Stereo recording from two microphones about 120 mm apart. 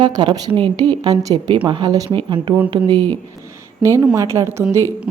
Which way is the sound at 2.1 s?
45° right (ahead or behind).